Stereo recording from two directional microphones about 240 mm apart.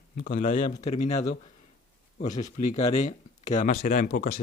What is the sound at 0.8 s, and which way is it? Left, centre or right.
Speech, left.